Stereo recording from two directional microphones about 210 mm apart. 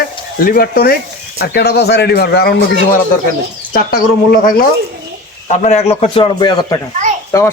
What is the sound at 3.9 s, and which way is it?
Speech, 45° left (ahead or behind).